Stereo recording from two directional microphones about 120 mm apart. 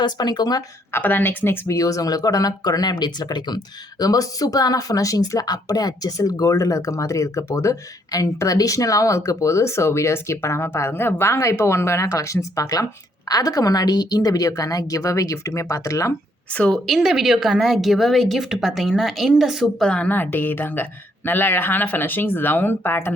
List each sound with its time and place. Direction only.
0.0 s speech: 35° left (ahead or behind)
0.9 s speech: 15° left (ahead or behind)
16.6 s a woman's voice: 5° left (ahead or behind)
19.9 s speech: 15° left (ahead or behind)